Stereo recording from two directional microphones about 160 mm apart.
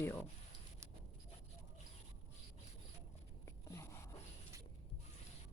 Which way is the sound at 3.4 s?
20° left (ahead or behind).